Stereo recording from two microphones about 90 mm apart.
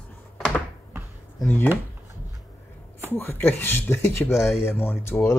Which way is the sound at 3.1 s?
25° left (ahead or behind).